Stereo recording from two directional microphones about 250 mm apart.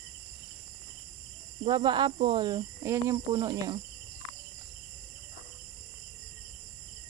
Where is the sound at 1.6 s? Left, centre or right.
Centre.